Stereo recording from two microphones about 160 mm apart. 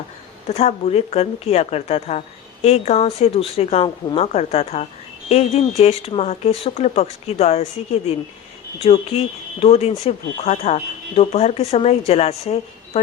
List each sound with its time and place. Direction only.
0.4 s speech: 40° left (ahead or behind)
8.8 s speech: 40° left (ahead or behind)